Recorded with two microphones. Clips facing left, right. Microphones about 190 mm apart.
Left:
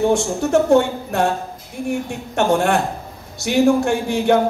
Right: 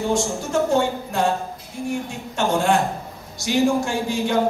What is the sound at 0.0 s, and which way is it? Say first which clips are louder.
Speech: left 5 dB; 65° left (ahead or behind).